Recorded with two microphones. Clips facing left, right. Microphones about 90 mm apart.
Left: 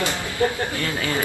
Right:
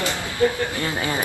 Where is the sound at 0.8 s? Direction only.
20° right (ahead or behind).